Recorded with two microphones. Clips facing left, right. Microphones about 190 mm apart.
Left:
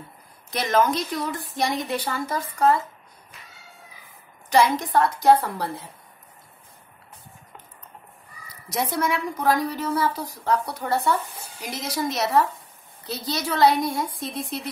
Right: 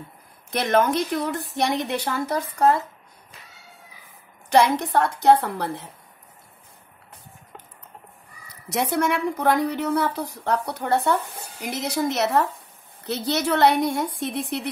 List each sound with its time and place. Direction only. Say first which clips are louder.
0.5 s a woman's voice: right 1 dB; 60° right (ahead or behind)
4.5 s a woman's voice: right 1 dB; 65° right (ahead or behind)
9.0 s a woman's voice: even; 65° right (ahead or behind)